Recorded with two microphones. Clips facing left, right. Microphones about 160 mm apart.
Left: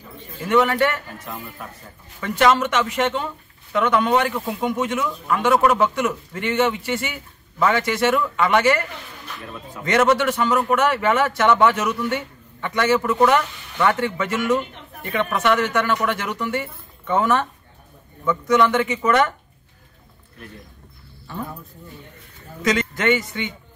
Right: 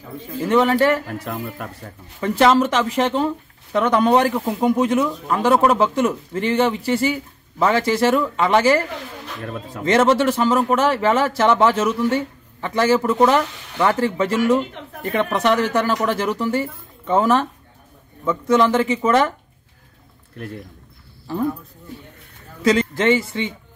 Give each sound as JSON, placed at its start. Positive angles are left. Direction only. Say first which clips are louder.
{"t": 0.5, "sound": "speech", "louder": "right 2 dB", "side_deg": -30}
{"t": 1.0, "sound": "a man's voice", "louder": "right 7 dB", "side_deg": -70}
{"t": 2.1, "sound": "speech", "louder": "right 3 dB", "side_deg": -30}
{"t": 9.8, "sound": "a man's voice", "louder": "right 2 dB", "side_deg": -30}
{"t": 22.6, "sound": "a man's voice", "louder": "right 4 dB", "side_deg": -30}